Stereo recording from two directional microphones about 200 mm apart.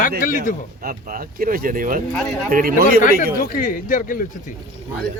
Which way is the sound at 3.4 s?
45° left (ahead or behind).